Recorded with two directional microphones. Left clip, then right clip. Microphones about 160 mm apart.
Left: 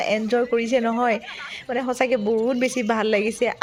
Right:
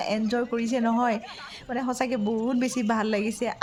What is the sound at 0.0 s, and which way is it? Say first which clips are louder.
A woman's voice: left 6 dB; 10° left (ahead or behind).